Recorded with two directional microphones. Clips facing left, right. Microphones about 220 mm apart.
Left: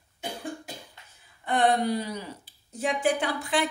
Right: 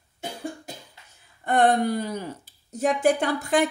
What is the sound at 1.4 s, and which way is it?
Speech, 45° right (ahead or behind).